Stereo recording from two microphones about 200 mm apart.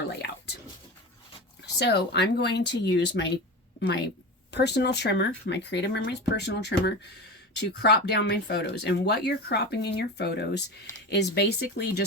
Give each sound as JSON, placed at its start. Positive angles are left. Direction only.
{"t": 1.6, "sound": "a woman's voice", "side_deg": 55}